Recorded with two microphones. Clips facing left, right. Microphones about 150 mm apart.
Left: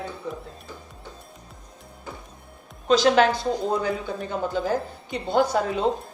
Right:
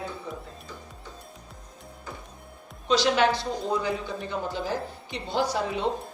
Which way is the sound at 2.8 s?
45° left (ahead or behind).